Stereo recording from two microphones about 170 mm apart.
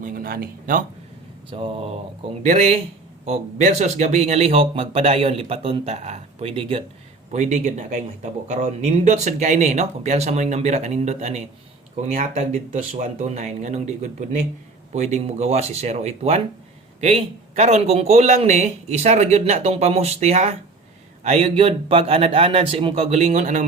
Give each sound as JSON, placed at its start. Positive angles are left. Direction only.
{"t": 0.0, "sound": "speech", "side_deg": -60}
{"t": 1.5, "sound": "speech", "side_deg": -30}
{"t": 2.4, "sound": "a man's voice", "side_deg": -45}
{"t": 7.3, "sound": "a man's voice", "side_deg": -45}